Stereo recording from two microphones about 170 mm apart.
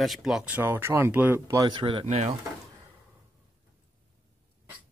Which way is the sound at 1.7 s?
30° right (ahead or behind).